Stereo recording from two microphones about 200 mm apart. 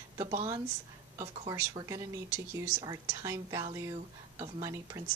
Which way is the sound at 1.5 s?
15° right (ahead or behind).